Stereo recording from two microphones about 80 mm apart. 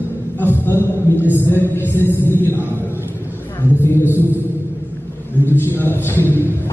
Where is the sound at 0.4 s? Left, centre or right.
Left.